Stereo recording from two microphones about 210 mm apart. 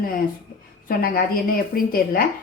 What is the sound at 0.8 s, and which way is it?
A woman's voice, 45° left (ahead or behind).